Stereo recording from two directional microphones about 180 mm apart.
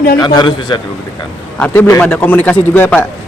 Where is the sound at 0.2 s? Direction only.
25° left (ahead or behind).